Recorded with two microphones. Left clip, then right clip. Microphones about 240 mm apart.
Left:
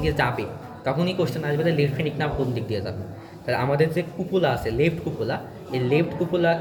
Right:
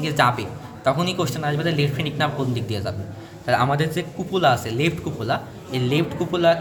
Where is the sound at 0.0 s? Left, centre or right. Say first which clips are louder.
Right 4 dB; right.